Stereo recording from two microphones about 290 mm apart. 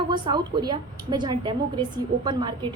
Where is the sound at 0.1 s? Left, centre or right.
Centre.